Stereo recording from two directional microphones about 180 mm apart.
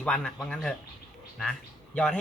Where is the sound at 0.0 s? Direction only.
5° left (ahead or behind).